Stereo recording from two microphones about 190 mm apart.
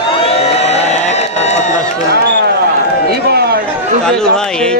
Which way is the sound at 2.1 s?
60° right (ahead or behind).